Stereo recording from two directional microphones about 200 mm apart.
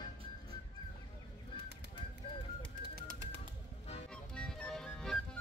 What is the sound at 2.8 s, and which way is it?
Music, 45° right (ahead or behind).